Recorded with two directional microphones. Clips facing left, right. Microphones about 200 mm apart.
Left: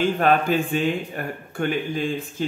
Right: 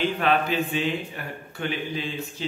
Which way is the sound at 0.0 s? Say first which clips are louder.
Left 4 dB; 45° left (ahead or behind).